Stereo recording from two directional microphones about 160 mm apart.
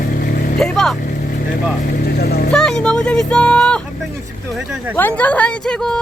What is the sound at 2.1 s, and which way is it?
Vehicle, 80° left.